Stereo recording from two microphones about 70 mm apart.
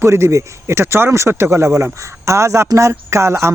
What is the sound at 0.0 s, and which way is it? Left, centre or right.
Speech, right.